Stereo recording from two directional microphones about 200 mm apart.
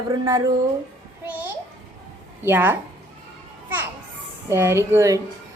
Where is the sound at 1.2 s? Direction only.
10° right (ahead or behind).